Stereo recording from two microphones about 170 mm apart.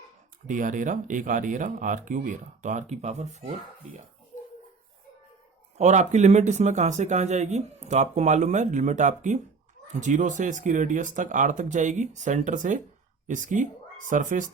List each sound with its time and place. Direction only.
0.4 s speech: 50° right (ahead or behind)
5.7 s speech: 45° right (ahead or behind)